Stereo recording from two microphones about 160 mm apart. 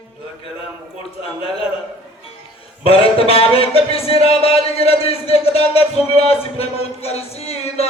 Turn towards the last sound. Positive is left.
turn(degrees=40)  # may be behind; listen again after turning